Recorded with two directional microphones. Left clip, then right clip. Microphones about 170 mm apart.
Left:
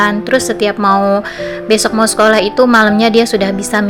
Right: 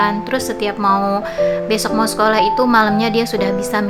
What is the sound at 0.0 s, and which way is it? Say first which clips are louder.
A woman's voice: left 5 dB; 20° left (ahead or behind).